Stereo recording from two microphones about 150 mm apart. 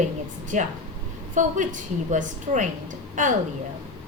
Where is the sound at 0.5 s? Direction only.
55° right (ahead or behind).